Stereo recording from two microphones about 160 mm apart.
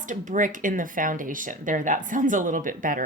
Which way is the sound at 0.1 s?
55° right (ahead or behind).